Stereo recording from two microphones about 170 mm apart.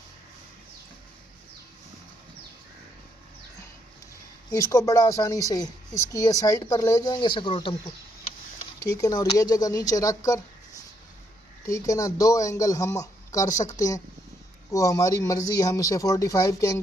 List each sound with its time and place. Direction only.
4.5 s speech: 20° left (ahead or behind)
8.9 s speech: 20° left (ahead or behind)
11.6 s speech: 20° left (ahead or behind)